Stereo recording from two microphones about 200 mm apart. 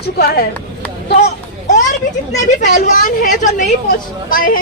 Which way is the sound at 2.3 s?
35° left (ahead or behind).